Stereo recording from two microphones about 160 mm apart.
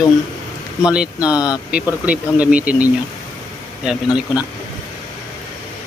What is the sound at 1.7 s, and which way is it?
Speech, 10° right (ahead or behind).